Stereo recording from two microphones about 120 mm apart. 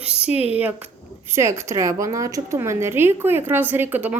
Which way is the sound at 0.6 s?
15° right (ahead or behind).